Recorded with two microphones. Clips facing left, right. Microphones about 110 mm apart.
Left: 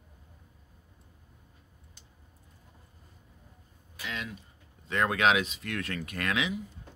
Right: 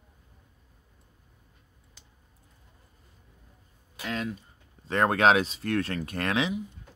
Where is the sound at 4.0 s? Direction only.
40° right (ahead or behind).